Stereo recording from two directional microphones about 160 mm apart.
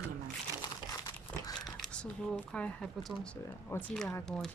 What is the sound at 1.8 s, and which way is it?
Speech, 5° left (ahead or behind).